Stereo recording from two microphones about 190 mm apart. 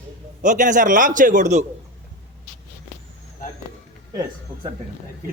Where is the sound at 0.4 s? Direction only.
40° right (ahead or behind).